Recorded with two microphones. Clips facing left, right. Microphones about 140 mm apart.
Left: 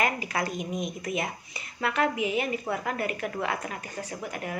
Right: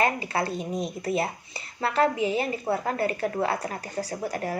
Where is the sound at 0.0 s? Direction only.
30° right (ahead or behind).